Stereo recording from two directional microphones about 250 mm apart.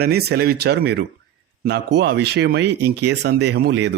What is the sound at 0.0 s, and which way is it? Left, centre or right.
Speech, right.